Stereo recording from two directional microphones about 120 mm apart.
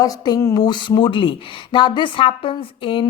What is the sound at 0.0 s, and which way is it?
A woman's voice, 30° left (ahead or behind).